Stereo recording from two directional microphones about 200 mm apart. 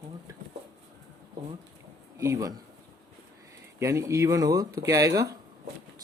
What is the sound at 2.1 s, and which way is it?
Speech, 15° right (ahead or behind).